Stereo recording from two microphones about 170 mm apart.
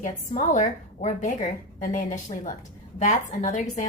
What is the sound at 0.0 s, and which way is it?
A woman's voice, 45° left (ahead or behind).